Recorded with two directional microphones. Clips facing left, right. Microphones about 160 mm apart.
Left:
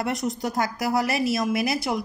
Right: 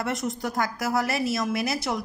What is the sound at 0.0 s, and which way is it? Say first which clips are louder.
A man's voice: left 2 dB; 15° left (ahead or behind).